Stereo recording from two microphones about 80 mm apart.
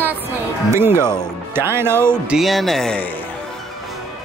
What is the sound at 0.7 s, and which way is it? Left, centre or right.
Speech, right.